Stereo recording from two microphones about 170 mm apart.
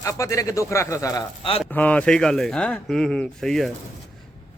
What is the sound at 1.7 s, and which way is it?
Speech, 10° left (ahead or behind).